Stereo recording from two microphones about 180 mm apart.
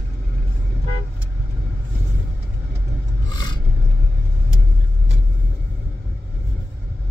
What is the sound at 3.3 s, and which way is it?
Filing, 25° left (ahead or behind).